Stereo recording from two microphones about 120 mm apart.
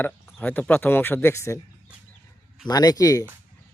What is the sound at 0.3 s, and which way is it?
A man's voice, 15° left (ahead or behind).